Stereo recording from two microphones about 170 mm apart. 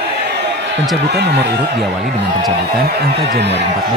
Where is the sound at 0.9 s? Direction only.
75° right (ahead or behind).